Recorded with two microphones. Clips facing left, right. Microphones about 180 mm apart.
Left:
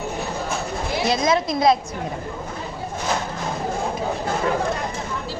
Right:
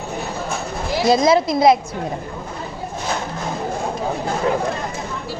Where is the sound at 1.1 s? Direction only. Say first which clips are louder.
Right 6 dB; 30° right (ahead or behind).